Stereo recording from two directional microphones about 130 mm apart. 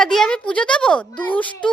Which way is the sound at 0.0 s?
5° left (ahead or behind).